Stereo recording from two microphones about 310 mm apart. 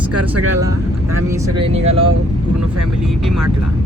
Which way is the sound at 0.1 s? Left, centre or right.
Right.